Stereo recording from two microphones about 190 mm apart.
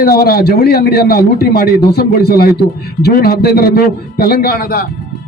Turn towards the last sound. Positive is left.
turn(degrees=55)  # may be behind; listen again after turning